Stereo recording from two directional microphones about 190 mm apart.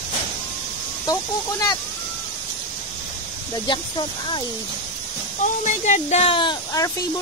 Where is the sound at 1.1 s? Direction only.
20° left (ahead or behind).